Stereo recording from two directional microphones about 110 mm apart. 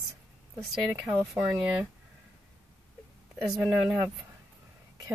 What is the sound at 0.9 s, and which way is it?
Speech, 15° right (ahead or behind).